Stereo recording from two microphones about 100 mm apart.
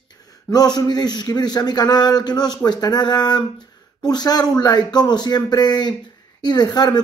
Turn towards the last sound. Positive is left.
turn(degrees=45)  # may be behind; listen again after turning